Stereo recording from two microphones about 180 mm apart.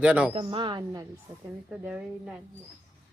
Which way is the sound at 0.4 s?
25° right (ahead or behind).